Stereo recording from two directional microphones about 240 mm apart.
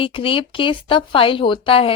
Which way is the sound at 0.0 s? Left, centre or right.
Left.